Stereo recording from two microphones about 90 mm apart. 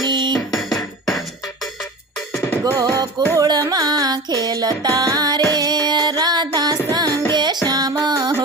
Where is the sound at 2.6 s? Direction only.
40° right (ahead or behind).